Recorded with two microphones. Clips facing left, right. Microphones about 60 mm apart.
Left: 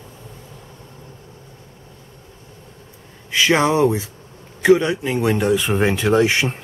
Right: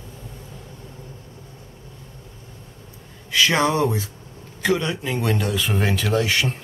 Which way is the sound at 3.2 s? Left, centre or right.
Left.